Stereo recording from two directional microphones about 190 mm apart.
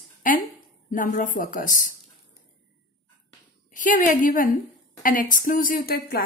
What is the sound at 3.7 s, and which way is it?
A woman's voice, 45° left (ahead or behind).